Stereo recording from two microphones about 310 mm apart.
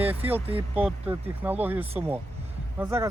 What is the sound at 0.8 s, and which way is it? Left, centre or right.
Speech, centre.